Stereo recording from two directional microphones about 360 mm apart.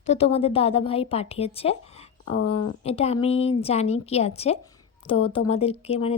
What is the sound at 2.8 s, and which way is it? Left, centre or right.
A woman's voice, centre.